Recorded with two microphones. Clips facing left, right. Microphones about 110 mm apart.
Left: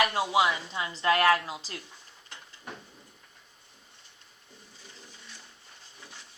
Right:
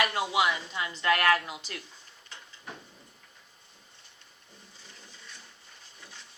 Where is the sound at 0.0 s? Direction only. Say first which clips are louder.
Left 2 dB; 25° left (ahead or behind).